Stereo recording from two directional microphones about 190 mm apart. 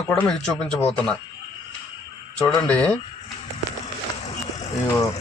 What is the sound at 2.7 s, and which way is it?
Speech, 5° left (ahead or behind).